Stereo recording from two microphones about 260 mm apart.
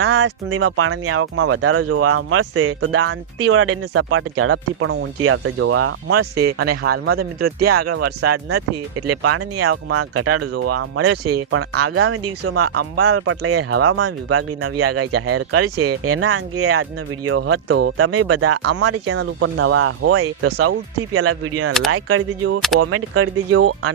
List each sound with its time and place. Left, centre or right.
0.0 s speech: right
6.6 s speech: right
8.4 s speech: right